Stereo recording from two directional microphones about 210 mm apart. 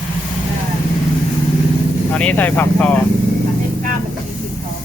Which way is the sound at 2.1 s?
5° left (ahead or behind).